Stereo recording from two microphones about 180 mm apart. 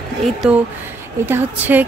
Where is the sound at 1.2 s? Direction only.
10° right (ahead or behind).